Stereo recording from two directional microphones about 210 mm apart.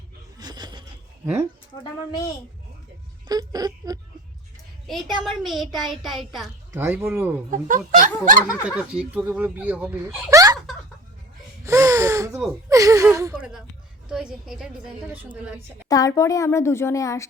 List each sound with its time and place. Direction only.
0.3 s a sound: 20° right (ahead or behind)
1.8 s a woman's voice: 15° left (ahead or behind)
3.2 s speech: 20° right (ahead or behind)
4.9 s speech: centre (ahead or behind)
7.5 s speech: 40° right (ahead or behind)
8.6 s speech: 5° right (ahead or behind)
11.6 s speech: 15° right (ahead or behind)
15.9 s a woman's voice: 15° left (ahead or behind)